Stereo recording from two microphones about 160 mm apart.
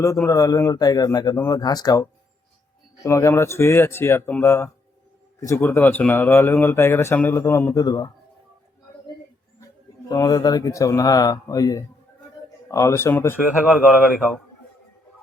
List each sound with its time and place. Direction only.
0.0 s speech: 20° left (ahead or behind)
10.1 s speech: 20° left (ahead or behind)
13.7 s speech: 5° right (ahead or behind)